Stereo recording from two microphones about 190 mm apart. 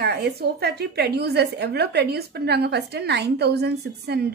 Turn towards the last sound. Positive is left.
turn(degrees=-60)  # may be behind; listen again after turning